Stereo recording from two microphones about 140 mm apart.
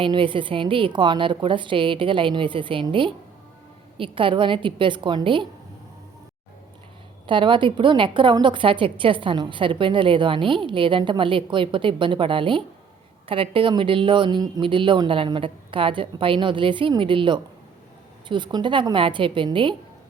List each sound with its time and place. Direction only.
0.0 s a woman's voice: 35° right (ahead or behind)
7.3 s a woman's voice: 35° right (ahead or behind)